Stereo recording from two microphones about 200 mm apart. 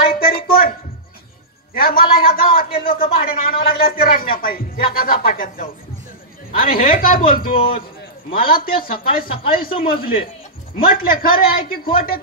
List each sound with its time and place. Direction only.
0.0 s a sound: 45° left (ahead or behind)
1.7 s a man's voice: 45° left (ahead or behind)
7.5 s a man's voice: 25° left (ahead or behind)
8.4 s a man's voice: 45° left (ahead or behind)